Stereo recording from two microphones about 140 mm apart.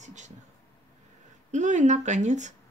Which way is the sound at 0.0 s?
60° right (ahead or behind).